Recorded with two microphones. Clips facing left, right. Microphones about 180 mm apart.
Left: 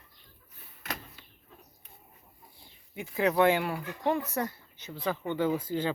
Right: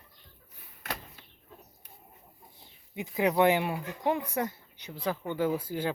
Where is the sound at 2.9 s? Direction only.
20° right (ahead or behind).